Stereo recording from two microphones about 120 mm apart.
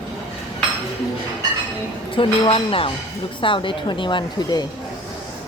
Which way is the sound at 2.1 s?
45° left (ahead or behind).